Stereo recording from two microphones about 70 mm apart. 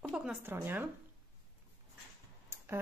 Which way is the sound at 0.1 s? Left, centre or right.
Centre.